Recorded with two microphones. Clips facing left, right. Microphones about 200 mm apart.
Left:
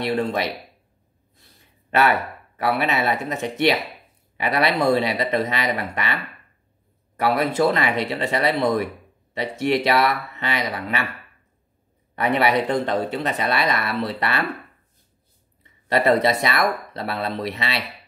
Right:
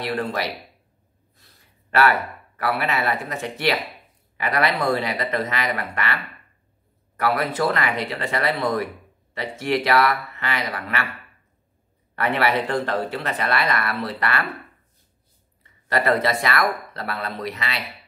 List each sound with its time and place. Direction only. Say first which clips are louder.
0.0 s speech: left 3 dB; 25° left (ahead or behind)
1.9 s speech: even; 20° left (ahead or behind)
7.2 s speech: left 3 dB; 25° left (ahead or behind)
12.2 s speech: left 2 dB; 20° left (ahead or behind)
15.9 s speech: left 3 dB; 25° left (ahead or behind)